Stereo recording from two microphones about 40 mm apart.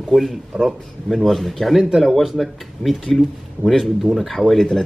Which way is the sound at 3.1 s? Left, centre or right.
Centre.